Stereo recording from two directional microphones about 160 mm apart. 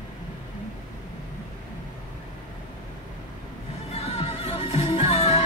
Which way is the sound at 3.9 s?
40° left (ahead or behind).